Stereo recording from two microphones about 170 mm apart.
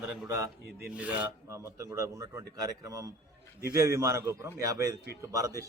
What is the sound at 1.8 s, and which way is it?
Speech, 20° right (ahead or behind).